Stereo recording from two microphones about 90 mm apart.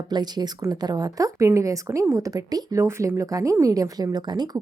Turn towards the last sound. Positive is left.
turn(degrees=-50)  # may be behind; listen again after turning